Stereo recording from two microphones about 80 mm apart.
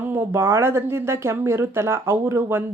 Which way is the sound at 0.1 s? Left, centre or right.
Right.